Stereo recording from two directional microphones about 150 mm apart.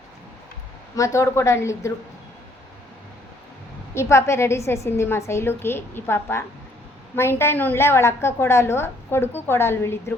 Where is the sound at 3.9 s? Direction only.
20° left (ahead or behind).